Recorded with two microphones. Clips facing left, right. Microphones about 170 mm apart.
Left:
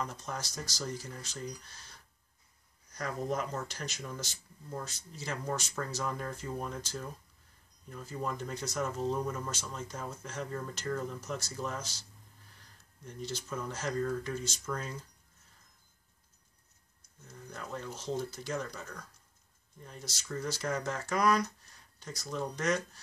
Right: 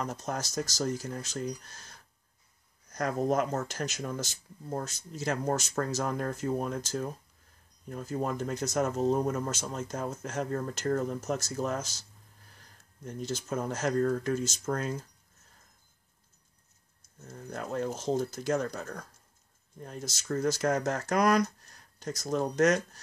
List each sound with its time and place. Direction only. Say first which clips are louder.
0.0 s speech: right 5 dB; 45° right (ahead or behind)
17.2 s speech: right 7 dB; 50° right (ahead or behind)